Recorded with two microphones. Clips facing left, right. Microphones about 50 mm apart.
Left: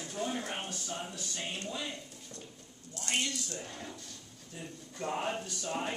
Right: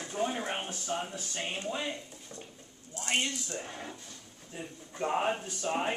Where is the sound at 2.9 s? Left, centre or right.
Right.